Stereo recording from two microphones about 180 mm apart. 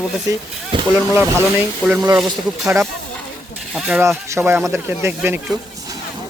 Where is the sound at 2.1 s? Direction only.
5° right (ahead or behind).